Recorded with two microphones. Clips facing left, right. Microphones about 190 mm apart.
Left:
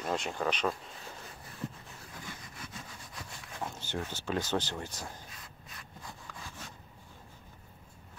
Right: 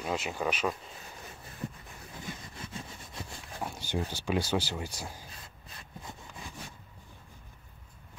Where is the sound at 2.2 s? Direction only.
25° right (ahead or behind).